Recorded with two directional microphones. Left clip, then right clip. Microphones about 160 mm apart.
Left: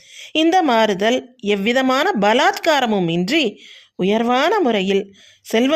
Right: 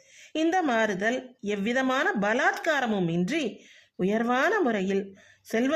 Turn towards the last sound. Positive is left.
turn(degrees=25)  # may be behind; listen again after turning